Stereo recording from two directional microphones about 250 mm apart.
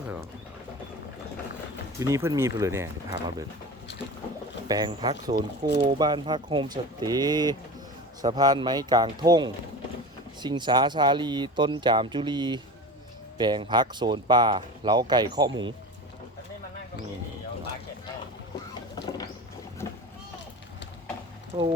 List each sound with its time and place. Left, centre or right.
2.0 s speech: centre
4.7 s speech: centre
19.0 s vehicle: centre
19.8 s boat: centre
21.5 s speech: centre